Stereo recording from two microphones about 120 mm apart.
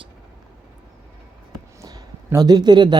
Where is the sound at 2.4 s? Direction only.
35° right (ahead or behind).